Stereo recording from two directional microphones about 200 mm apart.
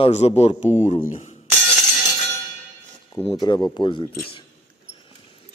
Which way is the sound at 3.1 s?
20° left (ahead or behind).